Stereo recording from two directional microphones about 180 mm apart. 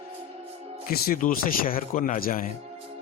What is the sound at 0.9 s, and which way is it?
A man's voice, 50° left (ahead or behind).